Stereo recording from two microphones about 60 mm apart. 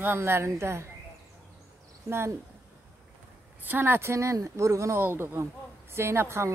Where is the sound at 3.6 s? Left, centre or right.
Right.